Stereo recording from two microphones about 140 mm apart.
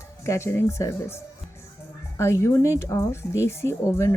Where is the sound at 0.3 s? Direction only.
20° left (ahead or behind).